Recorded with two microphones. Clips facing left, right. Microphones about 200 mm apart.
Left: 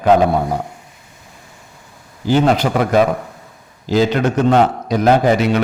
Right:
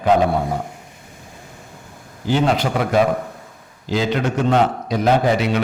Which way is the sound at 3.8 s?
40° left (ahead or behind).